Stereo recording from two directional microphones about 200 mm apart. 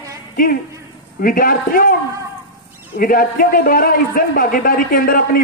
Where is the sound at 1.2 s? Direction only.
45° left (ahead or behind).